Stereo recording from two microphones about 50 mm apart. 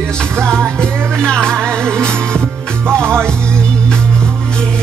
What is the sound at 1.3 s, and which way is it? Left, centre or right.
Music, centre.